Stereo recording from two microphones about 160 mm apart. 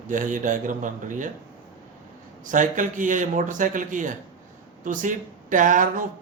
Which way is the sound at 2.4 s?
55° right (ahead or behind).